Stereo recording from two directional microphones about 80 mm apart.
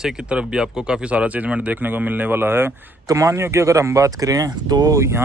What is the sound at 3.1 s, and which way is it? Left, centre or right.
Speech, right.